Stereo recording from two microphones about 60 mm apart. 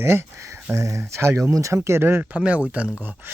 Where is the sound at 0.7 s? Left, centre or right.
Right.